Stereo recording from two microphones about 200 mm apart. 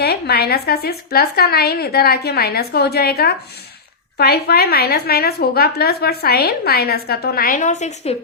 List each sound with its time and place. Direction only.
0.0 s a woman's voice: 50° left (ahead or behind); by 8.1 s 35° left (ahead or behind)